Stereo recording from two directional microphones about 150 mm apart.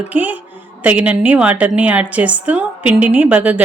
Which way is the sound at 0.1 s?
10° right (ahead or behind).